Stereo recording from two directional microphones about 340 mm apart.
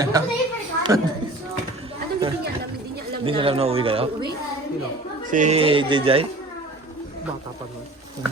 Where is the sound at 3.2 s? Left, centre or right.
Centre.